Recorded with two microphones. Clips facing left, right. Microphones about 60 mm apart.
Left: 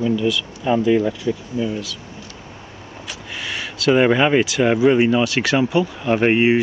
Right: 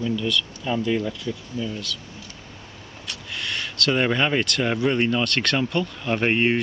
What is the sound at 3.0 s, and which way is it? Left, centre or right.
Speech, centre.